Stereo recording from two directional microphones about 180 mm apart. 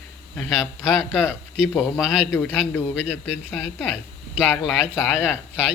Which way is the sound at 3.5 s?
5° right (ahead or behind).